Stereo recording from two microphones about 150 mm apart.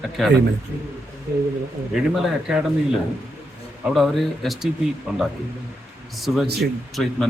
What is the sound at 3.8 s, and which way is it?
Speech, centre (ahead or behind).